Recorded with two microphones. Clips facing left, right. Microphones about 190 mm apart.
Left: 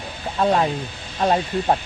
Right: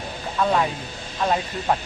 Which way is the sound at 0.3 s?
35° left (ahead or behind).